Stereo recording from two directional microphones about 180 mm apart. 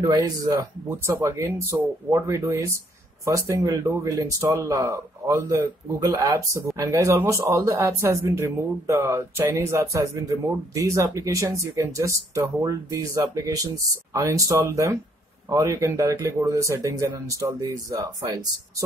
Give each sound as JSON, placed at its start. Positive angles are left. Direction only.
{"t": 0.0, "sound": "speech", "side_deg": -20}